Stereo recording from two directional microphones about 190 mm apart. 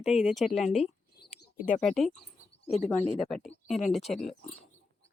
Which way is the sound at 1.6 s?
40° left (ahead or behind).